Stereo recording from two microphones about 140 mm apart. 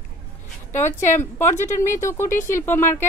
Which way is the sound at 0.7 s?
15° left (ahead or behind).